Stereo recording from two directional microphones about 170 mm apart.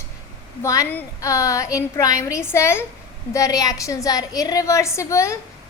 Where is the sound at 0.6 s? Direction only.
20° left (ahead or behind).